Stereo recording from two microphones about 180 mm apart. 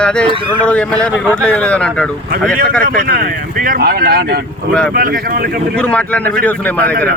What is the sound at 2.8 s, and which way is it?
Speech, 50° right (ahead or behind).